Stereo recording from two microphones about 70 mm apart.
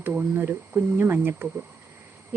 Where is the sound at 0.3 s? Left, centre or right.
Right.